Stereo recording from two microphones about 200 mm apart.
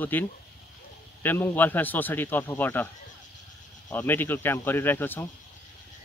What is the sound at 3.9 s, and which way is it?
Speech, 10° left (ahead or behind).